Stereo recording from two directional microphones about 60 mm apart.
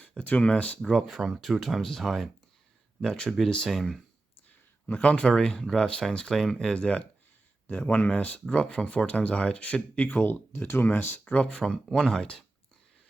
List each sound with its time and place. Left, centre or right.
0.2 s speech: left
0.8 s speech: centre
1.1 s speech: centre
3.2 s speech: centre
4.9 s speech: left
11.3 s speech: centre